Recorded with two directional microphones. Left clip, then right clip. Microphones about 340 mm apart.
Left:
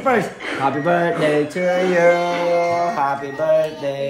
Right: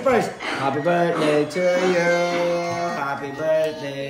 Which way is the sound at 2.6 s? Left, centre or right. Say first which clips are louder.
Left 6 dB; centre.